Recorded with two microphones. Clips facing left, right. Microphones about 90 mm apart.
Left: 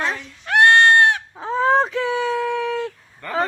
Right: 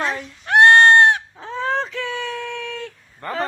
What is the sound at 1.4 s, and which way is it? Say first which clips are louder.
Fowl: left 6 dB; 30° left (ahead or behind).